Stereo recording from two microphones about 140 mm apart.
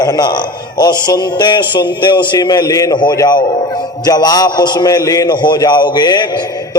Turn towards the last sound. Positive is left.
turn(degrees=30)  # may be behind; listen again after turning